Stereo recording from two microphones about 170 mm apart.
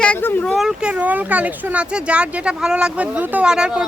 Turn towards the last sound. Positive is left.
turn(degrees=-5)  # may be behind; listen again after turning